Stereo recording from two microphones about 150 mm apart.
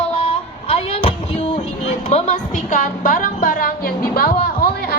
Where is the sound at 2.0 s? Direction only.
50° left (ahead or behind).